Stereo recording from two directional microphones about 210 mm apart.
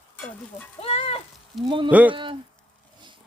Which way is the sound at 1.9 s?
5° right (ahead or behind).